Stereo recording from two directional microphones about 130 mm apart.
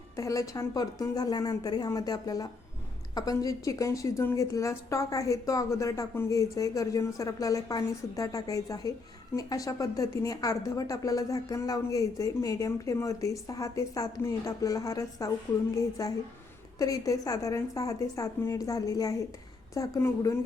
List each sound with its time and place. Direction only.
0.2 s a woman's voice: 25° left (ahead or behind)